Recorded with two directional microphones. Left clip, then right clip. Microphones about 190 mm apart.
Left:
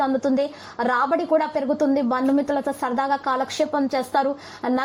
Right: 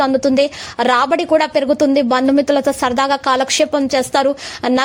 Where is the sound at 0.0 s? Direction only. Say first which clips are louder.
Right 8 dB; 30° right (ahead or behind).